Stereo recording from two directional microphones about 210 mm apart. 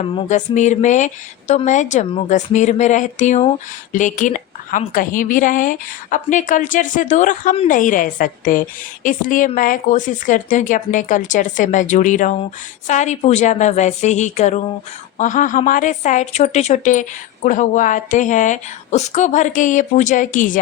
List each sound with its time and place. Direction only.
0.0 s speech: 25° left (ahead or behind)